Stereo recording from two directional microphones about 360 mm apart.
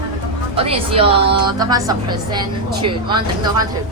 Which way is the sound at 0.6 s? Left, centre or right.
Centre.